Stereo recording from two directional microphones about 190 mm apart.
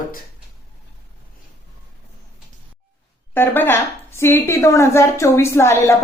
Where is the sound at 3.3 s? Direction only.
10° left (ahead or behind).